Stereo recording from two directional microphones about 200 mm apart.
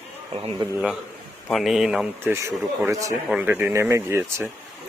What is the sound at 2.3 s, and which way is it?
Speech, 15° right (ahead or behind).